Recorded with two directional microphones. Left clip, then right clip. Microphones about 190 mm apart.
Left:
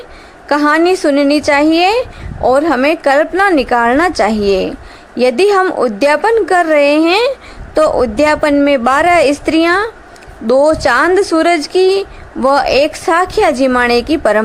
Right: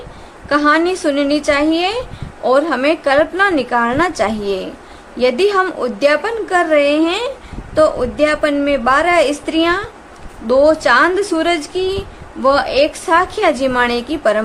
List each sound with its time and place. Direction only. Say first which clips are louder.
0.4 s a woman's voice: left 3 dB; 25° left (ahead or behind)